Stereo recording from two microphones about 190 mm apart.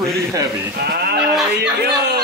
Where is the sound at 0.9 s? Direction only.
55° right (ahead or behind).